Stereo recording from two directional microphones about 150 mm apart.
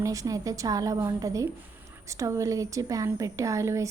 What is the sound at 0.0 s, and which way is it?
Speech, 20° right (ahead or behind).